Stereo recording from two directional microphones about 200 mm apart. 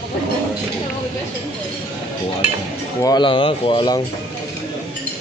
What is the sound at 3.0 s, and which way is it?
Speech, 20° left (ahead or behind).